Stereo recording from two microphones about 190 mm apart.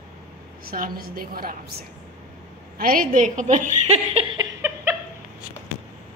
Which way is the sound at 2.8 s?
50° right (ahead or behind).